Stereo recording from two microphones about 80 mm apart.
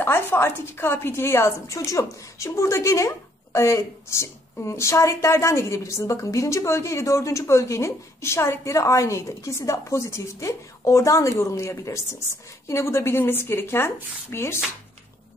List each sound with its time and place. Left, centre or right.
0.0 s a woman's voice: left